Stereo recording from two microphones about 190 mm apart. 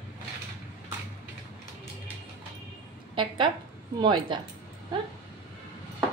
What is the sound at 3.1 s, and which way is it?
A woman's voice, 25° right (ahead or behind).